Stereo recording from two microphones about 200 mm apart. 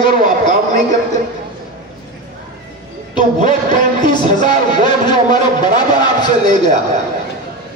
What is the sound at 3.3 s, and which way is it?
Music, 40° right (ahead or behind).